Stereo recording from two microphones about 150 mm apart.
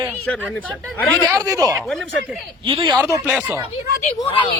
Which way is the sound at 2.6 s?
35° right (ahead or behind).